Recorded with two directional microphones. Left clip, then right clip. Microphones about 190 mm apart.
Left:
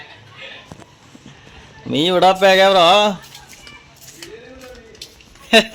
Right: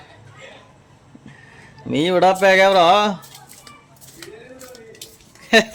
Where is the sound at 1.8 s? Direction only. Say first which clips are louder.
Left 2 dB; centre (ahead or behind).